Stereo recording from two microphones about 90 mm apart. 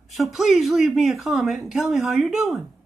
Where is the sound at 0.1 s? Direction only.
Centre (ahead or behind).